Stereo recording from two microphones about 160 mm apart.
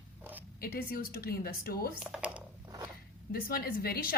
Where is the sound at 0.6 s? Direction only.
65° left (ahead or behind).